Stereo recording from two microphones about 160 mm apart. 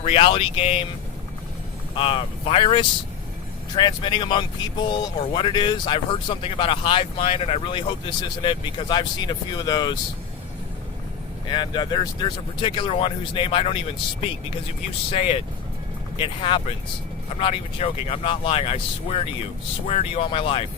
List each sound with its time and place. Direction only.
0.0 s speech: 40° left (ahead or behind)
2.0 s speech: 35° left (ahead or behind)
11.4 s speech: 30° left (ahead or behind)
15.1 s speech: 35° left (ahead or behind)